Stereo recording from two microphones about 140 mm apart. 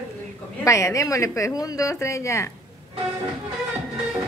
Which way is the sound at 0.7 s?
20° left (ahead or behind).